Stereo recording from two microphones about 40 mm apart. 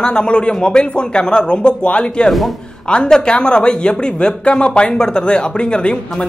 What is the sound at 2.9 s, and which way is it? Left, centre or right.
Speech, left.